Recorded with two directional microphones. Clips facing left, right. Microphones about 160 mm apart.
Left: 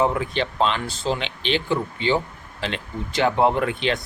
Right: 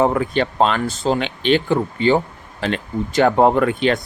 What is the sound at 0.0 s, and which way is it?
Speech, 50° right (ahead or behind).